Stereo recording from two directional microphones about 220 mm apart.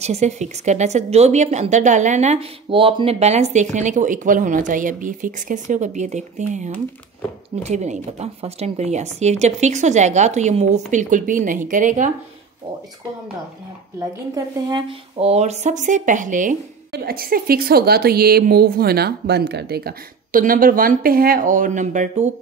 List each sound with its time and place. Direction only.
0.0 s speech: 30° right (ahead or behind)
13.9 s speech: 15° right (ahead or behind); by 22.3 s 30° right (ahead or behind)